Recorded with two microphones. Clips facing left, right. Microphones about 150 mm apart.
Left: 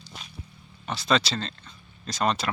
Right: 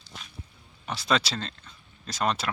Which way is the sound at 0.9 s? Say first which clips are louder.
Left 2 dB; 10° right (ahead or behind).